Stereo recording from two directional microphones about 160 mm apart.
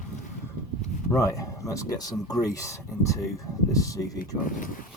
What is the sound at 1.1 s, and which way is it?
Speech, 20° left (ahead or behind).